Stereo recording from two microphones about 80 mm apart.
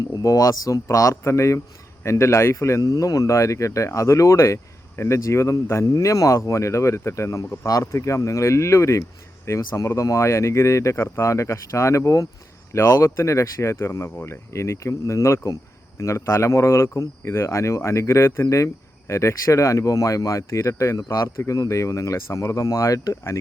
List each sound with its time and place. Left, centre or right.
0.1 s speech: left